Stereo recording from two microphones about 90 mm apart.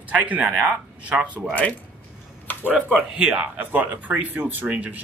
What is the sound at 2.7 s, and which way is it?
Speech, 15° right (ahead or behind).